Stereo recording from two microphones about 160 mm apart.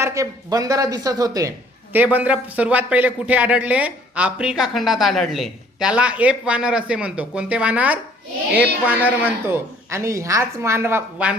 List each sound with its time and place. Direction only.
0.0 s speech: 20° right (ahead or behind)
1.9 s a man's voice: 10° right (ahead or behind)